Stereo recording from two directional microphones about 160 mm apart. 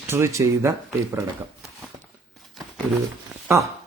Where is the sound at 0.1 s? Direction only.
15° right (ahead or behind).